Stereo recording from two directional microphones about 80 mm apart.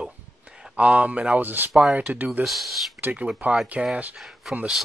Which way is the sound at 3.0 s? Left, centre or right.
Right.